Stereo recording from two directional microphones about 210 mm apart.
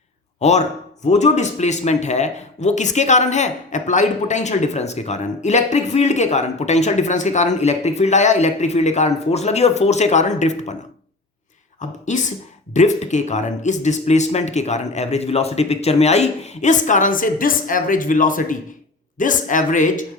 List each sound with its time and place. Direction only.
0.3 s a man's voice: 30° left (ahead or behind)
11.8 s a woman's voice: 35° left (ahead or behind)